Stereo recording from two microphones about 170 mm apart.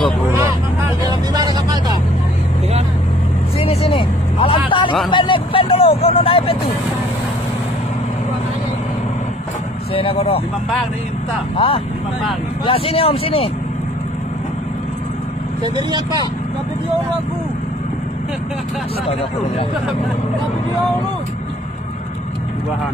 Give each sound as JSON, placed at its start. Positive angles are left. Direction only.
{"t": 1.0, "sound": "vehicle", "side_deg": -25}
{"t": 3.5, "sound": "vehicle", "side_deg": 35}
{"t": 5.1, "sound": "speech", "side_deg": 30}
{"t": 9.9, "sound": "speech", "side_deg": 35}
{"t": 11.5, "sound": "speech", "side_deg": 30}